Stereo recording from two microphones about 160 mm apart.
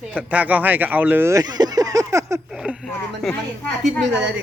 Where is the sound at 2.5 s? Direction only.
5° right (ahead or behind).